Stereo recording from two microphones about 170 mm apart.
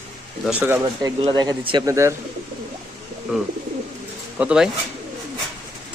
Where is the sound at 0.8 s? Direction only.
20° right (ahead or behind).